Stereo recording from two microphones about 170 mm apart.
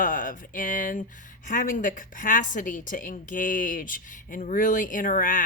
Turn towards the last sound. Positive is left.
turn(degrees=55)  # may be behind; listen again after turning